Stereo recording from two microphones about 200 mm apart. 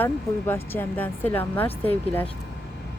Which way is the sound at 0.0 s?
10° left (ahead or behind).